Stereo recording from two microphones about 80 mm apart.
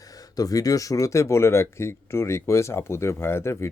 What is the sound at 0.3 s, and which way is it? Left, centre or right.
Speech, left.